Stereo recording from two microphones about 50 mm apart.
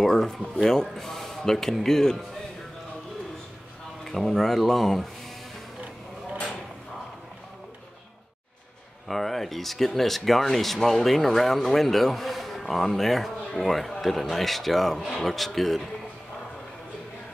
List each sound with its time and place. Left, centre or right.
0.0 s speech: centre
4.0 s speech: centre
9.0 s speech: centre